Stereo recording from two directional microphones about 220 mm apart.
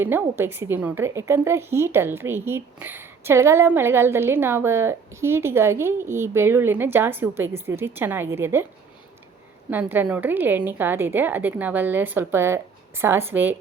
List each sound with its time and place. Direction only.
0.0 s a woman's voice: 10° right (ahead or behind)
9.6 s a woman's voice: 10° right (ahead or behind)